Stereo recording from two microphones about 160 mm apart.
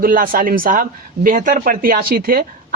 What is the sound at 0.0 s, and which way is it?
Speech, 60° right (ahead or behind).